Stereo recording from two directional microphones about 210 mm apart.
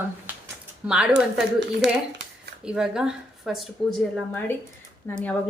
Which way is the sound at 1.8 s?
55° right (ahead or behind).